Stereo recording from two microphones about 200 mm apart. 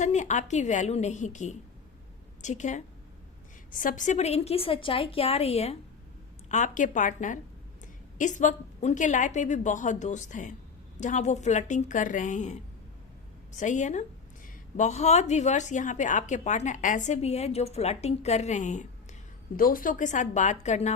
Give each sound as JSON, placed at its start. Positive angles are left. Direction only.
{"t": 0.0, "sound": "a woman's voice", "side_deg": 35}
{"t": 13.6, "sound": "a woman's voice", "side_deg": 35}